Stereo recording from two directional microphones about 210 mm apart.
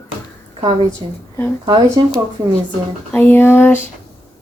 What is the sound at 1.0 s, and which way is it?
Speech, 20° right (ahead or behind).